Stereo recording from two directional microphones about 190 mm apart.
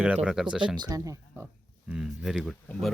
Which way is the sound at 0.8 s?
20° right (ahead or behind).